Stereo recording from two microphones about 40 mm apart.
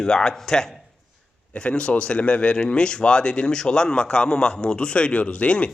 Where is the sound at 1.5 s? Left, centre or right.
Left.